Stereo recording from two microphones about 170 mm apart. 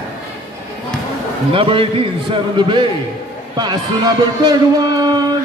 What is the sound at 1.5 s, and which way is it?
A man's voice, 30° right (ahead or behind).